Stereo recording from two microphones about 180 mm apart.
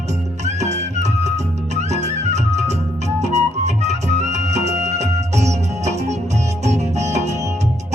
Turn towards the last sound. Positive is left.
turn(degrees=-40)  # may be behind; listen again after turning